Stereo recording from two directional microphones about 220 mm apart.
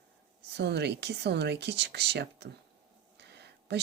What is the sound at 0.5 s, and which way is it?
Speech, 50° right (ahead or behind).